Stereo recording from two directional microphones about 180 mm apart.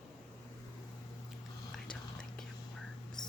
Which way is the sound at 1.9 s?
5° left (ahead or behind).